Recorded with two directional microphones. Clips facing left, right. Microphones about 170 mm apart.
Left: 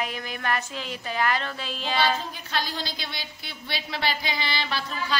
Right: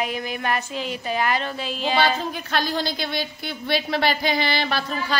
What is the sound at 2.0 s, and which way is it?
A woman's voice, 60° right (ahead or behind).